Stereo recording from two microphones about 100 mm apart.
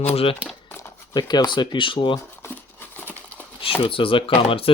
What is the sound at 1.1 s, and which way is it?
Speech, 45° left (ahead or behind).